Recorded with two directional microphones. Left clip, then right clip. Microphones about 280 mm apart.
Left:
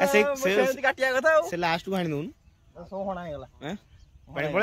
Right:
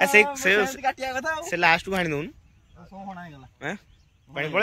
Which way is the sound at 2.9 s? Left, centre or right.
Left.